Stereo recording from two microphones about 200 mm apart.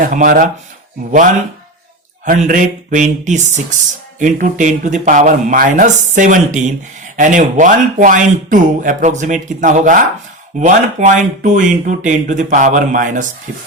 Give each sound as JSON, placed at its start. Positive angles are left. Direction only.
{"t": 0.0, "sound": "speech", "side_deg": -45}
{"t": 2.2, "sound": "speech", "side_deg": -40}